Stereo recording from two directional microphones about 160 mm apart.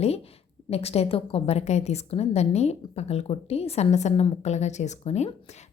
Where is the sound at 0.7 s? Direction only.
40° left (ahead or behind).